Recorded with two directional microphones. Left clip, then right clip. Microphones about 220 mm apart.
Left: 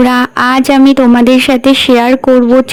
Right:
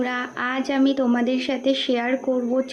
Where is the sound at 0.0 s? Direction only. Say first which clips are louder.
Left 16 dB; 45° left (ahead or behind).